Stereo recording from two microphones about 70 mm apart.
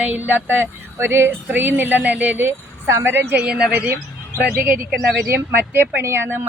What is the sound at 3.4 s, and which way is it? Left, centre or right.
Speech, centre.